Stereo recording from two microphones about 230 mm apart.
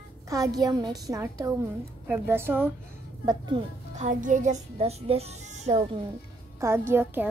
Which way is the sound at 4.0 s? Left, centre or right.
Right.